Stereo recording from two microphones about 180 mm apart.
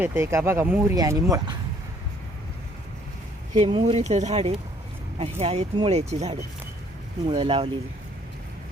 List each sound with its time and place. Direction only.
0.0 s speech: 15° right (ahead or behind)
3.5 s speech: 35° right (ahead or behind)